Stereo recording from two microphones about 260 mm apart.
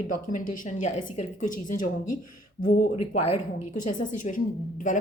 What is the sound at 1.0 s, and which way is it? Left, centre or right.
Speech, left.